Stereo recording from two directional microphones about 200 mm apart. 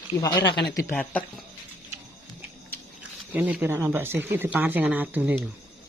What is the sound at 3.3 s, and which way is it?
Speech, 10° right (ahead or behind).